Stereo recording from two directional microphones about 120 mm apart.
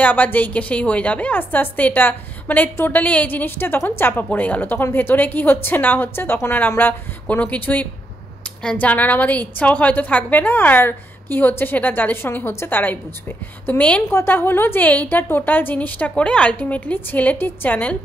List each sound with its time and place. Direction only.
0.0 s a woman's voice: 15° left (ahead or behind)